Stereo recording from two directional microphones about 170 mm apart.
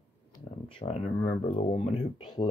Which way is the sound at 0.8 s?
35° left (ahead or behind).